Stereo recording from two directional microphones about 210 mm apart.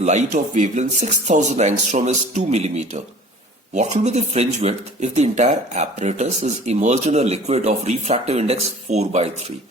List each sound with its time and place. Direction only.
0.0 s speech: 35° right (ahead or behind)